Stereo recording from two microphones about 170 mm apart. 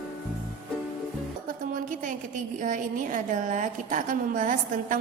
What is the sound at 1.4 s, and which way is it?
Music, 55° right (ahead or behind).